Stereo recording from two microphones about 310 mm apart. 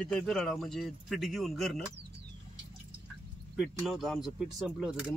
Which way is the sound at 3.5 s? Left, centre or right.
Centre.